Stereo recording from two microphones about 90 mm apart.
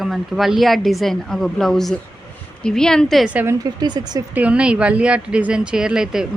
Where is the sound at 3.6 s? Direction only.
50° right (ahead or behind).